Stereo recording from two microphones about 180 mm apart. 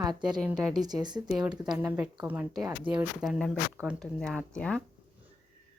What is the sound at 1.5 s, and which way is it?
Speech, 5° right (ahead or behind).